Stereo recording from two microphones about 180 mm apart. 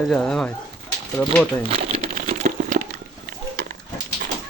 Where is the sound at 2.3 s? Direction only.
45° right (ahead or behind).